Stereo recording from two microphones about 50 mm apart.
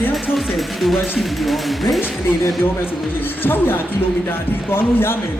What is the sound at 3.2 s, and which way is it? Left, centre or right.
Speech, left.